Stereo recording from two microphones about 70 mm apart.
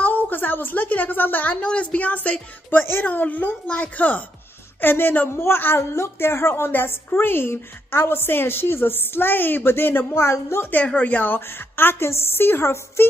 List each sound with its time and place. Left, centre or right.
0.0 s a woman's voice: left
4.8 s a woman's voice: left
11.0 s a woman's voice: left